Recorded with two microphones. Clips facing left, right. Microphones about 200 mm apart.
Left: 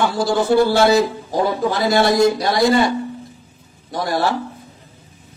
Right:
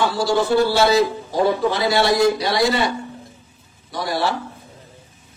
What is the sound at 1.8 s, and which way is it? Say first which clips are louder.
A man's voice: left 5 dB; 45° left (ahead or behind).